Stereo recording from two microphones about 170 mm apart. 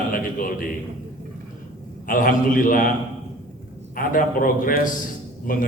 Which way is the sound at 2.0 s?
55° left (ahead or behind).